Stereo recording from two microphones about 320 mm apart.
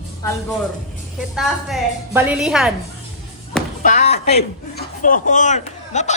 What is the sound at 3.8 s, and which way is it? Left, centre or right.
A man's voice, left.